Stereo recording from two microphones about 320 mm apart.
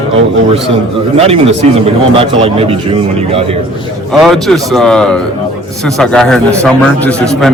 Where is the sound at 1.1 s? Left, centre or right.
Centre.